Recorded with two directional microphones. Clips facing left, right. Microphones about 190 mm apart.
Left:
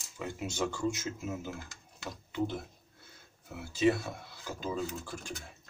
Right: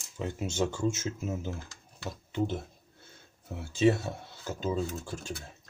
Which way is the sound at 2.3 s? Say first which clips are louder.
Right 2 dB; 25° right (ahead or behind).